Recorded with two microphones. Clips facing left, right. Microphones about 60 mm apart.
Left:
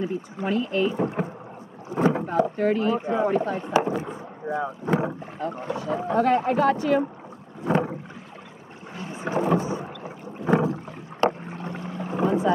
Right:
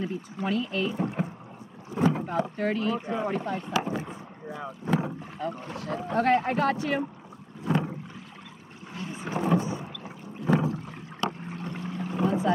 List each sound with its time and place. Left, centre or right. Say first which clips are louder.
0.5 s speech: left 5 dB; centre
2.0 s boat: left 3 dB; left
2.2 s speech: left 6 dB; centre
6.2 s speech: even; right
6.5 s speech: left 5 dB; left
6.8 s speech: left 6 dB; left
7.6 s boat: left 4 dB; left
8.9 s boat: left 5 dB; left